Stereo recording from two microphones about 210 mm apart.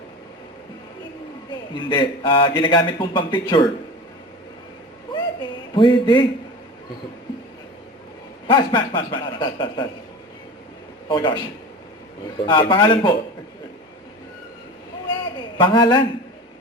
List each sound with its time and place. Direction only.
1.7 s a man's voice: 20° left (ahead or behind)
5.7 s a man's voice: 20° left (ahead or behind)
8.4 s a man's voice: 25° left (ahead or behind)
11.1 s a man's voice: 20° left (ahead or behind)
12.5 s a man's voice: 20° left (ahead or behind)
15.5 s a man's voice: 25° left (ahead or behind)